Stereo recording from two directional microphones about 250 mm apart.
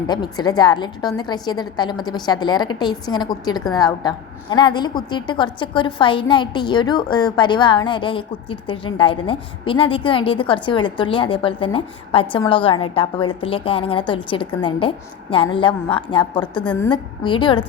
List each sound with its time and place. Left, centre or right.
0.1 s a woman's voice: centre